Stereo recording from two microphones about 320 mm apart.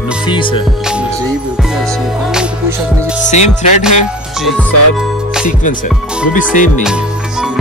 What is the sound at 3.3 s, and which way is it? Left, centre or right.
Speech, left.